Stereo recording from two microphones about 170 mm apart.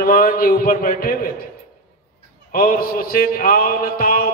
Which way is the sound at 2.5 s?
55° left (ahead or behind).